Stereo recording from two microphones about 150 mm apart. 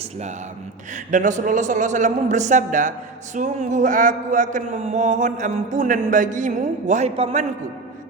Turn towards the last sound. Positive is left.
turn(degrees=-50)  # may be behind; listen again after turning